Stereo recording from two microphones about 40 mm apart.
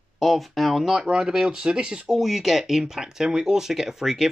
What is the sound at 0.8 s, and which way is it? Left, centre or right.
Speech, centre.